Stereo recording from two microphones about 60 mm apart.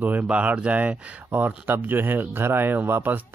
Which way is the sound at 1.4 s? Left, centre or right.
Right.